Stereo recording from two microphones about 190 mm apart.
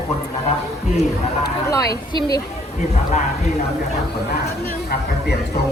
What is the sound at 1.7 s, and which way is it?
Speech, 20° left (ahead or behind).